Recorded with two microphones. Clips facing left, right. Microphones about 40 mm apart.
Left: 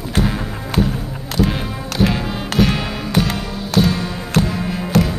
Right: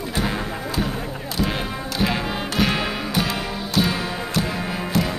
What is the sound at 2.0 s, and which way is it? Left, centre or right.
Music, centre.